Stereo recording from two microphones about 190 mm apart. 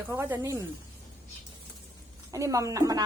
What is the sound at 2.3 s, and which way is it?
Speech, 15° right (ahead or behind).